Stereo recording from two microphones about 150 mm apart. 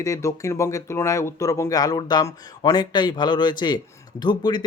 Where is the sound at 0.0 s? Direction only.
20° left (ahead or behind).